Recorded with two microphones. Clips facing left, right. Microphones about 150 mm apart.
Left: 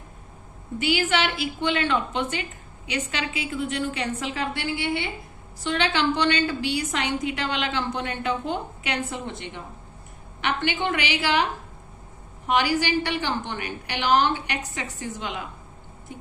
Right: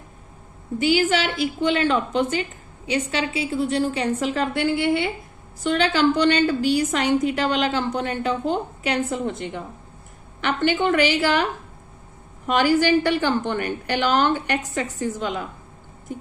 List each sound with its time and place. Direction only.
0.8 s a woman's voice: 35° right (ahead or behind)
12.5 s a woman's voice: 50° right (ahead or behind)